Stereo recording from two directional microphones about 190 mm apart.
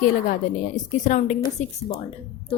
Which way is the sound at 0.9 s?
40° left (ahead or behind).